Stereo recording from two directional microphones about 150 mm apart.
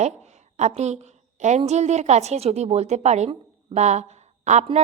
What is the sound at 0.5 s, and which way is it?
A woman's voice, 50° right (ahead or behind).